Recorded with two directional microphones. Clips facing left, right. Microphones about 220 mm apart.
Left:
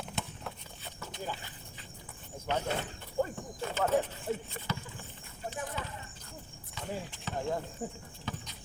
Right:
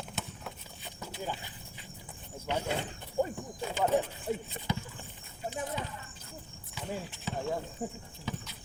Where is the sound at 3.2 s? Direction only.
15° right (ahead or behind).